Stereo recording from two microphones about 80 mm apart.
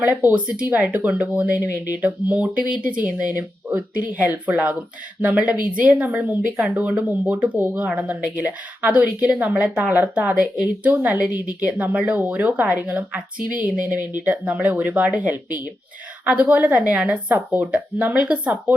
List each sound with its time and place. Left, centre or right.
0.0 s a woman's voice: right
3.3 s speech: right
4.0 s speech: centre
5.5 s a woman's voice: centre